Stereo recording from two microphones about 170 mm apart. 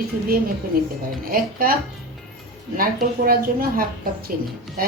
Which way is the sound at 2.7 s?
60° right (ahead or behind).